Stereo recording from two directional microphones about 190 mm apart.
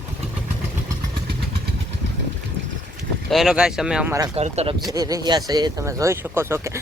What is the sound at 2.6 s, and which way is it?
Vehicle, 70° right (ahead or behind).